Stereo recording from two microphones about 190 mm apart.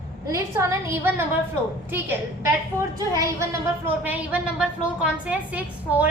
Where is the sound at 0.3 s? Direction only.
15° right (ahead or behind).